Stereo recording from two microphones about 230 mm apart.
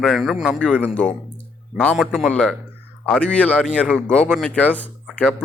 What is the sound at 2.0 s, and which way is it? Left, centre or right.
Speech, centre.